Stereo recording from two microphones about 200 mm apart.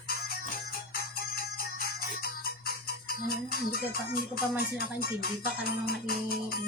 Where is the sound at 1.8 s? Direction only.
50° left (ahead or behind).